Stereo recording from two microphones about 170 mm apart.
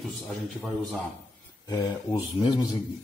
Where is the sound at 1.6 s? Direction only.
20° left (ahead or behind).